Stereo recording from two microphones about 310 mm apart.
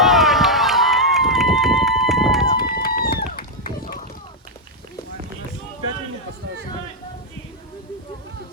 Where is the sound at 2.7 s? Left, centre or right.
Left.